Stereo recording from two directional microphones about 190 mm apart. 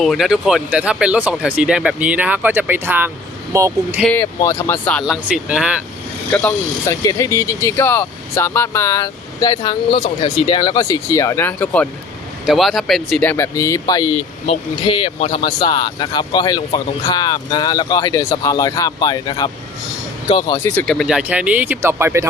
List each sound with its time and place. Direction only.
0.0 s speech: centre (ahead or behind); by 4.0 s 15° right (ahead or behind)
4.0 s speech: 10° left (ahead or behind)
6.3 s speech: 5° left (ahead or behind); by 20.6 s 25° left (ahead or behind)
20.7 s speech: 5° left (ahead or behind); by 22.3 s 15° right (ahead or behind)